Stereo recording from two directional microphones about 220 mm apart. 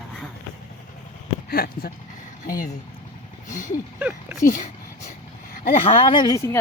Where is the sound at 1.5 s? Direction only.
45° left (ahead or behind).